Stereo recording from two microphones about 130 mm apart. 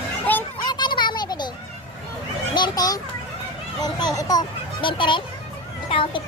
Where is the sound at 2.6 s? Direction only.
35° left (ahead or behind).